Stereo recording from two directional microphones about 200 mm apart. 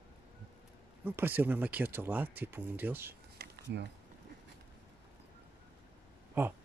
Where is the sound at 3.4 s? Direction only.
55° right (ahead or behind).